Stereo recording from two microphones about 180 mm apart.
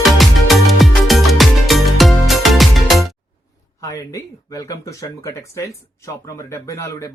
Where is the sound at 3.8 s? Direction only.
20° left (ahead or behind).